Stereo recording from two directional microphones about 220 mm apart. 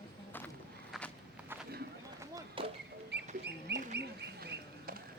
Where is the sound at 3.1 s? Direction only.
50° right (ahead or behind).